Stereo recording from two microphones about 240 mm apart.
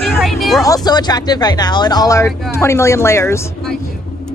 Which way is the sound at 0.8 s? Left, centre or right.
Centre.